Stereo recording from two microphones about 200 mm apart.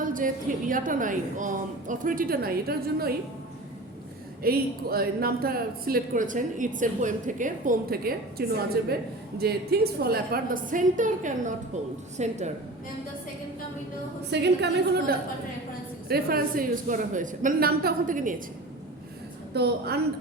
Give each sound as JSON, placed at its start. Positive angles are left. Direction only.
{"t": 0.0, "sound": "a sound", "side_deg": -40}
{"t": 0.7, "sound": "speech", "side_deg": -40}
{"t": 4.4, "sound": "a woman's voice", "side_deg": -50}
{"t": 14.3, "sound": "a woman's voice", "side_deg": -55}
{"t": 19.5, "sound": "a woman's voice", "side_deg": -55}